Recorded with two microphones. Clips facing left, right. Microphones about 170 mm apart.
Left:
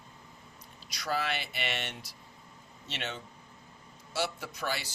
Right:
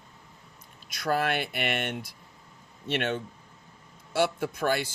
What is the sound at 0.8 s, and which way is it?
Speech, 50° right (ahead or behind).